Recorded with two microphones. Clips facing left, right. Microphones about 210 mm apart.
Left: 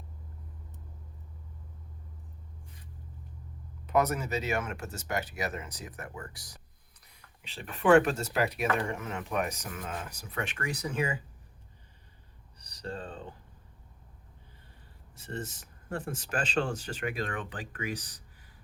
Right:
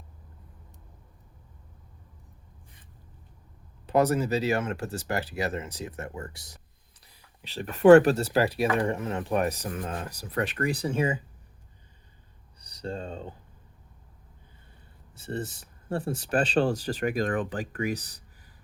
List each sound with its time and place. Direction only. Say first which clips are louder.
3.8 s speech: right 5 dB; 30° right (ahead or behind)
7.4 s speech: right 9 dB; 40° right (ahead or behind)
12.8 s speech: right 4 dB; 25° right (ahead or behind)
15.4 s speech: right 6 dB; 35° right (ahead or behind)